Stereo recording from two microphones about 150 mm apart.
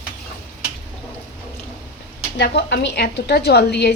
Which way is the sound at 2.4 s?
90° left.